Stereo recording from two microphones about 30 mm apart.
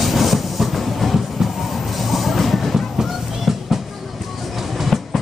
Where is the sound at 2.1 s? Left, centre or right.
Centre.